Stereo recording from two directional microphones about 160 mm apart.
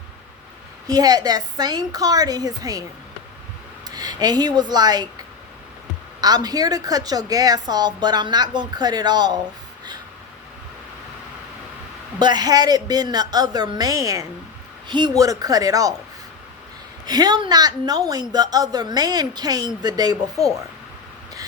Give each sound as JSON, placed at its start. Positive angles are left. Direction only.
{"t": 0.9, "sound": "a woman's voice", "side_deg": -25}
{"t": 3.8, "sound": "speech", "side_deg": -25}
{"t": 6.1, "sound": "a woman's voice", "side_deg": -25}
{"t": 12.2, "sound": "a woman's voice", "side_deg": -25}
{"t": 17.1, "sound": "a woman's voice", "side_deg": -25}